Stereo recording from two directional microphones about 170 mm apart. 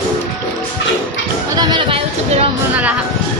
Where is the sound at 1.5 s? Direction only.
25° right (ahead or behind).